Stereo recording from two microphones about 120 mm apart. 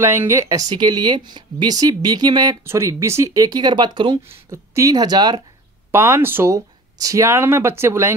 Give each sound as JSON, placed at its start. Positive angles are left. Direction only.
{"t": 0.0, "sound": "speech", "side_deg": -20}
{"t": 2.6, "sound": "speech", "side_deg": -20}
{"t": 4.5, "sound": "speech", "side_deg": -25}
{"t": 5.9, "sound": "speech", "side_deg": -20}